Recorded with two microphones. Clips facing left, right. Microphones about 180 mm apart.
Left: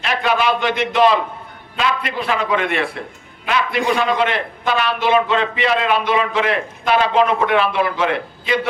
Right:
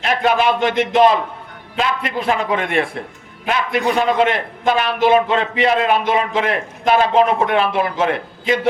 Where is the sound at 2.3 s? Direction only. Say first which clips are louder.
Right 1 dB; 45° right (ahead or behind).